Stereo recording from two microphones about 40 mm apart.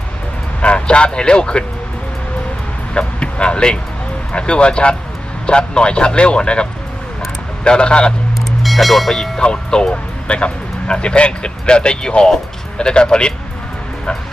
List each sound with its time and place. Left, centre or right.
0.6 s speech: left
2.9 s speech: left
8.6 s speech: centre
9.4 s speech: left